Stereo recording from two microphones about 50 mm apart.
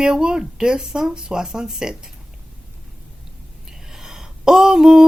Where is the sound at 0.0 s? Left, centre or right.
Centre.